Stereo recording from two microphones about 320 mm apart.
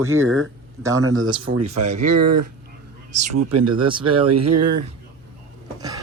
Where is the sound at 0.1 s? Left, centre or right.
Right.